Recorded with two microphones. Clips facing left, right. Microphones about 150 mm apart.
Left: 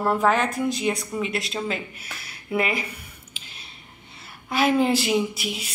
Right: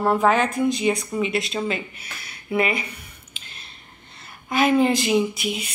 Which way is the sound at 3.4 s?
5° left (ahead or behind).